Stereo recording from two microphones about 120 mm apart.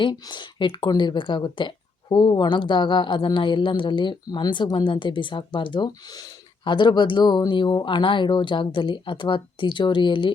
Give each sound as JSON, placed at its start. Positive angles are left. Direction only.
{"t": 0.0, "sound": "speech", "side_deg": 40}